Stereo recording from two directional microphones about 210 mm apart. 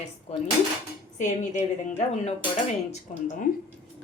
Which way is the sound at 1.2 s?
35° left (ahead or behind).